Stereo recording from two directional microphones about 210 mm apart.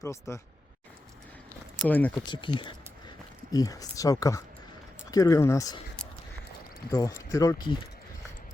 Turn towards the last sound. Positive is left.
turn(degrees=20)  # may be behind; listen again after turning